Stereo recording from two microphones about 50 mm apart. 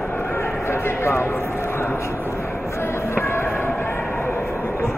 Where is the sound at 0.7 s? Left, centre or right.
Left.